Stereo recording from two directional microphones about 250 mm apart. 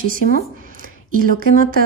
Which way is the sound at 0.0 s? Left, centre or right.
Right.